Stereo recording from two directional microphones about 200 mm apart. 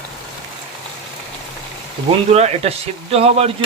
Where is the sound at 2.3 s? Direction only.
30° right (ahead or behind).